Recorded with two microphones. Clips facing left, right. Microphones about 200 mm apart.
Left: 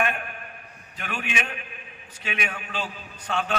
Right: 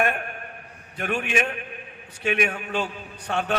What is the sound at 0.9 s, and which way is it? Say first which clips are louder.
A man's voice: right 7 dB; 50° right (ahead or behind).